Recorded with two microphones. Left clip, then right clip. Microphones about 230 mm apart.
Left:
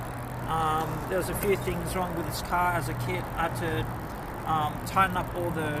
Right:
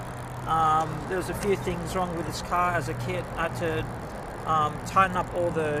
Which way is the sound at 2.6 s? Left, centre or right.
Right.